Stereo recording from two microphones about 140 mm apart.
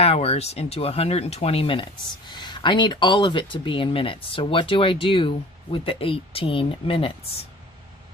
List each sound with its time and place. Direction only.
0.0 s speech: 45° left (ahead or behind)